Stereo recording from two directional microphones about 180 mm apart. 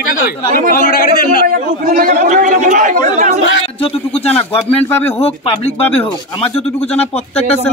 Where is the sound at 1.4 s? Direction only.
50° right (ahead or behind).